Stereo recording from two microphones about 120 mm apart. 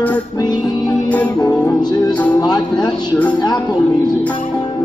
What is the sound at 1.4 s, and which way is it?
Music, 35° left (ahead or behind).